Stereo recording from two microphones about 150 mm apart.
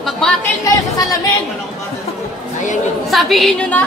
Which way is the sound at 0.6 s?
20° left (ahead or behind).